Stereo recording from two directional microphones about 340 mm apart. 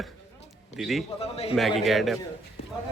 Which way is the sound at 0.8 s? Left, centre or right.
Centre.